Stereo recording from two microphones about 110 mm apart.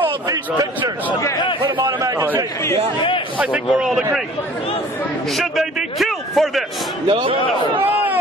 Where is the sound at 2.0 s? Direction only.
25° right (ahead or behind).